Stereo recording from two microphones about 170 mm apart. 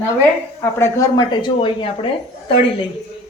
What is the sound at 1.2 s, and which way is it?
Speech, 25° left (ahead or behind).